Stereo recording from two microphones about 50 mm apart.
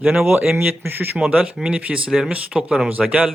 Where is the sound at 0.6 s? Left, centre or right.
Right.